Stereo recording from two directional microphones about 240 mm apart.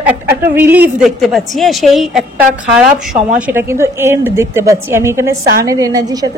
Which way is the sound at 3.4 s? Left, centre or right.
Centre.